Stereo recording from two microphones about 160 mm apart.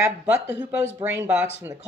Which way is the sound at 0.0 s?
15° right (ahead or behind).